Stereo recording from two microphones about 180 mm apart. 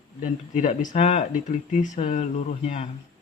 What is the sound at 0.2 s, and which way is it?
Speech, 45° left (ahead or behind).